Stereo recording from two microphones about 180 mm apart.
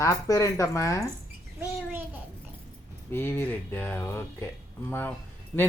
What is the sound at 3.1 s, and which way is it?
Speech, 10° left (ahead or behind).